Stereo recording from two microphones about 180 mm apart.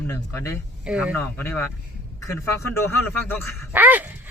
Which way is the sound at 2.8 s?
10° left (ahead or behind).